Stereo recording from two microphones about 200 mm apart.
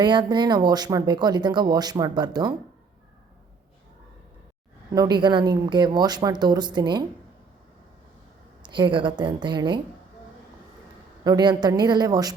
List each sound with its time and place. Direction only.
0.0 s speech: 20° right (ahead or behind)
4.9 s speech: 20° right (ahead or behind)
8.6 s speech: 20° right (ahead or behind)
11.2 s speech: 20° right (ahead or behind)